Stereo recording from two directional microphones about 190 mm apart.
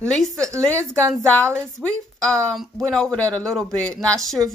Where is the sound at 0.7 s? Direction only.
15° right (ahead or behind).